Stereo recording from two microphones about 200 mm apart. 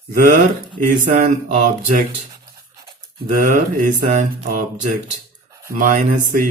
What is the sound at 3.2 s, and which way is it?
Mantra, 40° right (ahead or behind).